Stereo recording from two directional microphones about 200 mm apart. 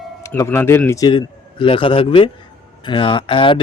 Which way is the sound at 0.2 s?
15° left (ahead or behind).